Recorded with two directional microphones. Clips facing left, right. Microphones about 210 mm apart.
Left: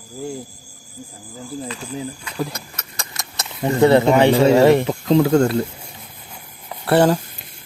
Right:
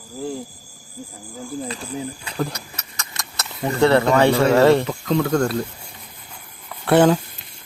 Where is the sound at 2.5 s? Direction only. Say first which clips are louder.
Even; 50° left (ahead or behind).